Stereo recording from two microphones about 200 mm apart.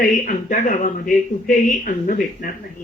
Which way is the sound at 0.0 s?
45° left (ahead or behind).